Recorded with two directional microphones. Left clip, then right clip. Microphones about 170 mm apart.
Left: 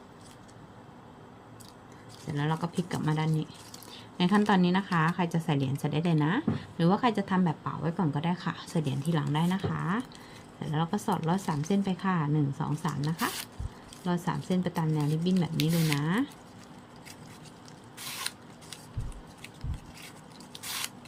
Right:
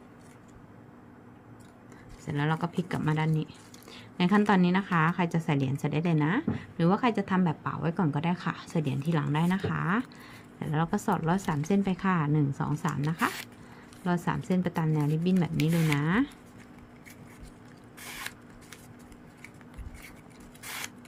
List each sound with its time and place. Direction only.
2.2 s a woman's voice: 20° right (ahead or behind)
18.2 s scissors: 10° right (ahead or behind)